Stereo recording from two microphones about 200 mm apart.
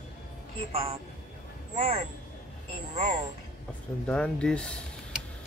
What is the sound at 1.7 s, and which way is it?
Speech, 35° right (ahead or behind).